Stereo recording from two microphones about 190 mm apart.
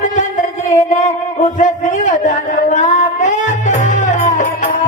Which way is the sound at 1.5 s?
40° left (ahead or behind).